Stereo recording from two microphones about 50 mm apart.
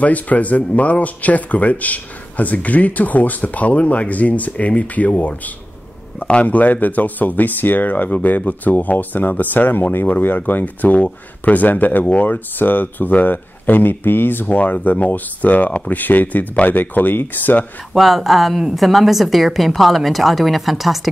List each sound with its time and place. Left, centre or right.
0.0 s a man's voice: left
6.4 s speech: left
14.5 s speech: left
17.9 s a woman's voice: centre